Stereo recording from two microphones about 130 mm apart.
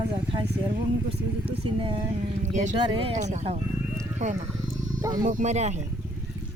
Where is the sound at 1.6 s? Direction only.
40° right (ahead or behind).